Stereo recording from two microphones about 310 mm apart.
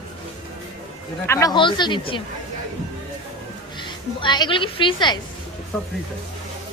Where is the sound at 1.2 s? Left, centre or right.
Centre.